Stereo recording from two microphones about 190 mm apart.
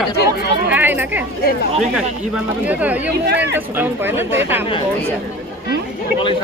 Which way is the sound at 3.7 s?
10° right (ahead or behind).